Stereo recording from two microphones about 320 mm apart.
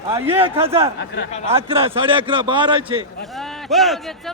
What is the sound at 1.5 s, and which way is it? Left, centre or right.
A man's voice, centre.